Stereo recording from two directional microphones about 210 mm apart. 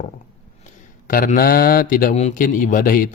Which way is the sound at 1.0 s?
40° left (ahead or behind).